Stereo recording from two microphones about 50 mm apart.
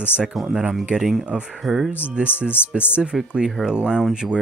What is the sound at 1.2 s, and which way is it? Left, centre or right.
Speech, right.